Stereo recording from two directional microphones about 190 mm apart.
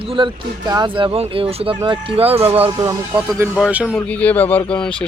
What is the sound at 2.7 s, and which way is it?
Speech, 15° right (ahead or behind).